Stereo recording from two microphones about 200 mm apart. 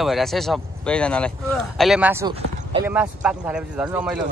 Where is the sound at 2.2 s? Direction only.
25° right (ahead or behind).